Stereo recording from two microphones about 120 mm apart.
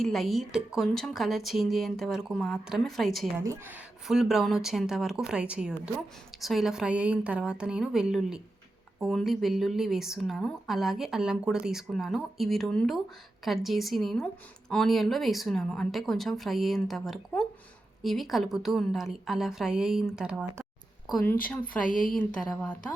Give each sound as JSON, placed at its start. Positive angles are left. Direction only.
{"t": 0.0, "sound": "speech", "side_deg": 0}
{"t": 3.4, "sound": "speech", "side_deg": -25}
{"t": 4.0, "sound": "a woman's voice", "side_deg": -5}
{"t": 21.2, "sound": "speech", "side_deg": 15}